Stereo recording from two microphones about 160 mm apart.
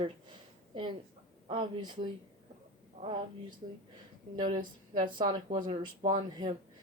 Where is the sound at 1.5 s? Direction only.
35° right (ahead or behind).